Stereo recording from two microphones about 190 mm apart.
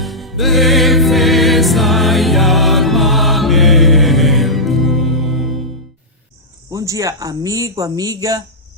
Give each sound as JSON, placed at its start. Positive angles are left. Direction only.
{"t": 0.0, "sound": "music", "side_deg": 0}
{"t": 6.7, "sound": "speech", "side_deg": -15}